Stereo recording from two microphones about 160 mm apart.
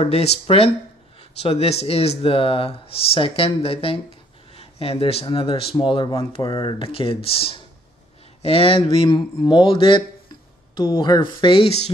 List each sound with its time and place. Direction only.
0.0 s speech: 40° left (ahead or behind)